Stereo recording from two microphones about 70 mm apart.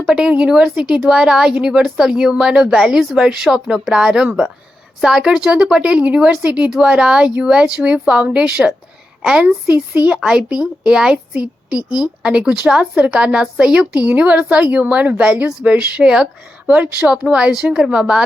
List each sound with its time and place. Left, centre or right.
0.0 s a woman's voice: centre
9.6 s a woman's voice: right
11.8 s a woman's voice: left
12.2 s a woman's voice: centre